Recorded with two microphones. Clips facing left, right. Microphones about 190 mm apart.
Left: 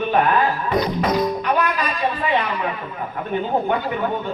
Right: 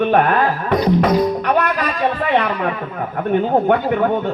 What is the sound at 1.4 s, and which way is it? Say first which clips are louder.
A man's voice: right 3 dB; 65° right (ahead or behind).